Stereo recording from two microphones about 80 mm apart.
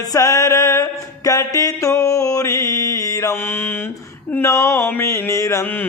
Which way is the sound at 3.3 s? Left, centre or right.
Left.